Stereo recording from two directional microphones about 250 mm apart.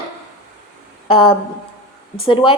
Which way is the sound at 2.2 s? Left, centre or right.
Left.